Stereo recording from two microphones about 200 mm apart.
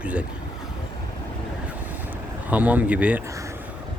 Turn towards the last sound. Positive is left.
turn(degrees=-5)  # may be behind; listen again after turning